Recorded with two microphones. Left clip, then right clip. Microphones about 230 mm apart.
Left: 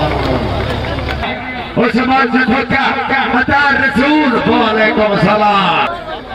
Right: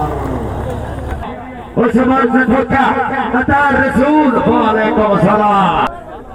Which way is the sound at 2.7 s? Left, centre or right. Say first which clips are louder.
Even; left.